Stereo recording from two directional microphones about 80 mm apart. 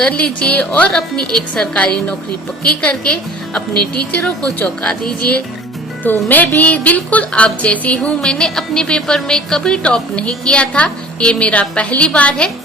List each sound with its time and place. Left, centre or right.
0.0 s speech: centre